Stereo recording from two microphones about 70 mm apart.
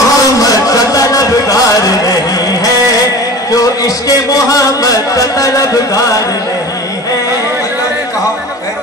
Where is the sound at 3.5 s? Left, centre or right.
Left.